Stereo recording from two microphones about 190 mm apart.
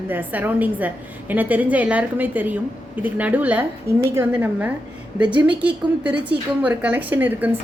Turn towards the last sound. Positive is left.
turn(degrees=-10)  # may be behind; listen again after turning